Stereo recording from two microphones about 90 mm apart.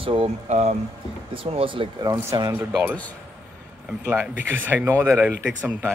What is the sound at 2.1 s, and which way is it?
Speech, 55° right (ahead or behind).